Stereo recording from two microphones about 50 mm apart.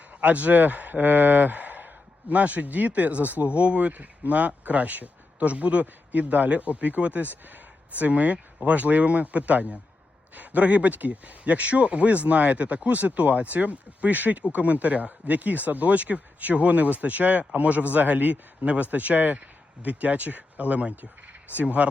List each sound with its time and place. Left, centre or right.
0.1 s a man's voice: right